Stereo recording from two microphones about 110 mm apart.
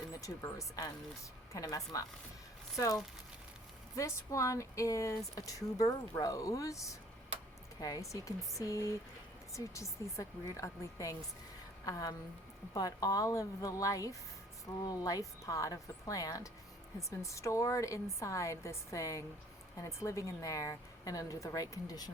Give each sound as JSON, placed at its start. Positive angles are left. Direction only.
{"t": 0.2, "sound": "a woman's voice", "side_deg": 30}